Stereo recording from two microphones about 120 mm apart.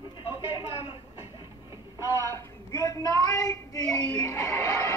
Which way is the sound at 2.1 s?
25° left (ahead or behind).